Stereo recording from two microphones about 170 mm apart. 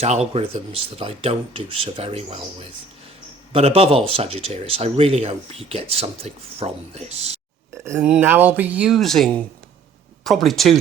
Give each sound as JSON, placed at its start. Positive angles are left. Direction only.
{"t": 0.0, "sound": "speech", "side_deg": -40}
{"t": 7.9, "sound": "speech", "side_deg": -10}